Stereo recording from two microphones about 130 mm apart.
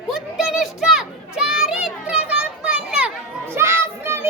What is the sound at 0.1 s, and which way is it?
Children playing, 5° right (ahead or behind).